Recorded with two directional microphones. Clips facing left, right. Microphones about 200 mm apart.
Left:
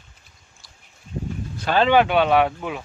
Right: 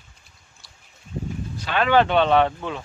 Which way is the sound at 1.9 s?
10° left (ahead or behind).